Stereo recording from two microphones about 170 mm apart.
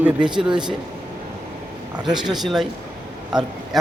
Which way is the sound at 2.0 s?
Centre (ahead or behind).